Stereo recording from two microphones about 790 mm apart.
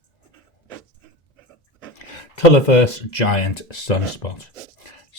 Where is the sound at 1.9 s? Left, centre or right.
Left.